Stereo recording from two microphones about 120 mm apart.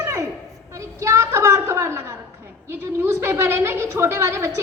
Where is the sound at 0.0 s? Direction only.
25° right (ahead or behind).